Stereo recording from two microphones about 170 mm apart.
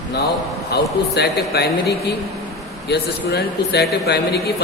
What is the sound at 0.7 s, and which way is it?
A man's voice, 70° left (ahead or behind).